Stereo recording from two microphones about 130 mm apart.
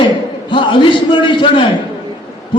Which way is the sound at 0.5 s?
40° left (ahead or behind).